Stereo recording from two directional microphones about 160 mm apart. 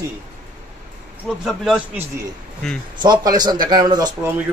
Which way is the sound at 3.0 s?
25° right (ahead or behind).